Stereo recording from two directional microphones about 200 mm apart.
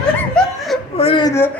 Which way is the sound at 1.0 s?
25° left (ahead or behind).